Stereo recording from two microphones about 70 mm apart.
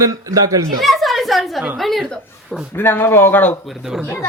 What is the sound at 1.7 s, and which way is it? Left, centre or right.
Speech, centre.